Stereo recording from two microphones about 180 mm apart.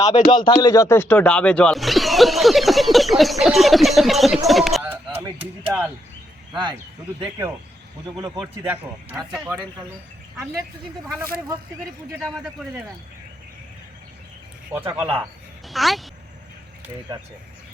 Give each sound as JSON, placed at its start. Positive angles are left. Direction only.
{"t": 0.0, "sound": "speech", "side_deg": 25}
{"t": 4.4, "sound": "a sound", "side_deg": 0}
{"t": 4.8, "sound": "a sound", "side_deg": -10}
{"t": 6.5, "sound": "a man's voice", "side_deg": -25}
{"t": 12.2, "sound": "speech", "side_deg": 0}
{"t": 14.7, "sound": "a man's voice", "side_deg": -10}